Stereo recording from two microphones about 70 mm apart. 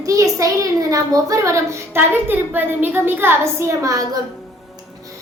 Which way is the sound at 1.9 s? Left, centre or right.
Right.